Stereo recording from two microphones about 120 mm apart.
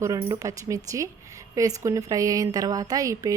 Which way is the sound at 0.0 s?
25° right (ahead or behind).